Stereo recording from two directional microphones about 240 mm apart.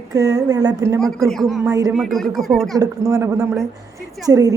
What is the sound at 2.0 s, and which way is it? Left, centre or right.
Speech, centre.